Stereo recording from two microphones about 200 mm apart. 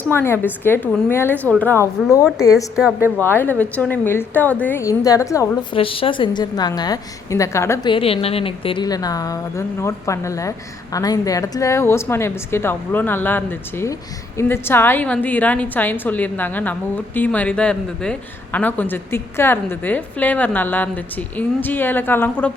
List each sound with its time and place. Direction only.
0.1 s a woman's voice: 10° left (ahead or behind)
2.7 s a woman's voice: centre (ahead or behind)
3.2 s a woman's voice: 10° left (ahead or behind)
5.7 s speech: 25° left (ahead or behind)
7.9 s a woman's voice: 30° left (ahead or behind); by 22.5 s 10° left (ahead or behind)